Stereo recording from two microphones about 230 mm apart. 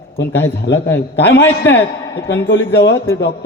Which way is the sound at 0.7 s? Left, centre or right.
Left.